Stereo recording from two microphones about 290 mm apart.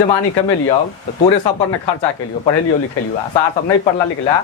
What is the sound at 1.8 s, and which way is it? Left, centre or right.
Speech, centre.